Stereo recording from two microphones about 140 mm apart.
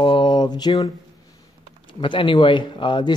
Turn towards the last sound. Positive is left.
turn(degrees=35)  # may be behind; listen again after turning